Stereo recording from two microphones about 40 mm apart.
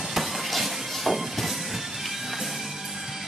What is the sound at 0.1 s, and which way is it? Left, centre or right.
Music, centre.